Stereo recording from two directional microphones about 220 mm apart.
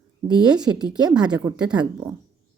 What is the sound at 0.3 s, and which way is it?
Speech, 20° right (ahead or behind).